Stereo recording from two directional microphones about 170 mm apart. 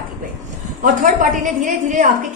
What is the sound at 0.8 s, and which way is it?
A woman's voice, 50° right (ahead or behind).